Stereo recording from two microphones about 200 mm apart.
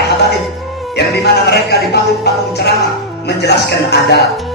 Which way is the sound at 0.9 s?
55° left (ahead or behind).